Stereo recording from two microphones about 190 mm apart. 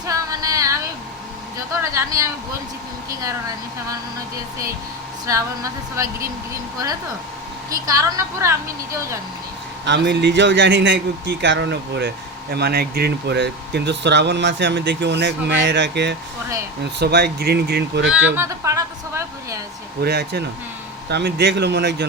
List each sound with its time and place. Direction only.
0.0 s a sound: 20° right (ahead or behind)
1.8 s a woman's voice: 15° right (ahead or behind)
5.3 s a woman's voice: 15° right (ahead or behind)
7.7 s a woman's voice: 20° right (ahead or behind)
9.8 s speech: 65° right (ahead or behind)
18.3 s a woman's voice: 15° right (ahead or behind)
20.0 s speech: 60° right (ahead or behind)